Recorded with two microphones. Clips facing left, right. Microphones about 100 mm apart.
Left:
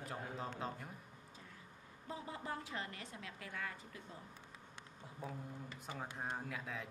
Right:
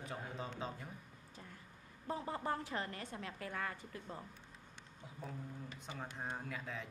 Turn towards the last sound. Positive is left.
turn(degrees=0)  # may be behind; listen again after turning